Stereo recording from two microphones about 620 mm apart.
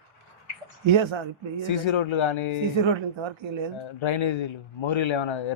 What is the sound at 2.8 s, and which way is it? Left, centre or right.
Speech, right.